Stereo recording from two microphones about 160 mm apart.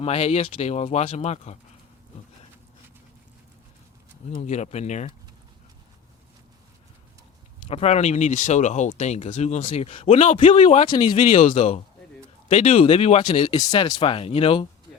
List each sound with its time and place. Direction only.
0.0 s speech: 40° left (ahead or behind)
4.4 s speech: 45° left (ahead or behind)
7.7 s speech: 40° left (ahead or behind)
10.3 s speech: 35° left (ahead or behind)
10.8 s speech: 30° left (ahead or behind)
11.3 s speech: 45° left (ahead or behind)